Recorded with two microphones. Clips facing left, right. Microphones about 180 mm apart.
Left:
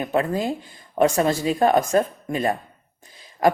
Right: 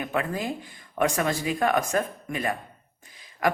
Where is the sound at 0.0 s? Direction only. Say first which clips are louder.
Left 6 dB; 30° left (ahead or behind).